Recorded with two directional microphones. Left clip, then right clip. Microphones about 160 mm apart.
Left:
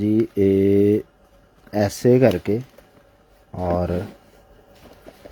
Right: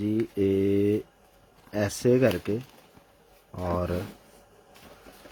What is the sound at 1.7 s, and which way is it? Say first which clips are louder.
Speech: left 7 dB; 20° left (ahead or behind).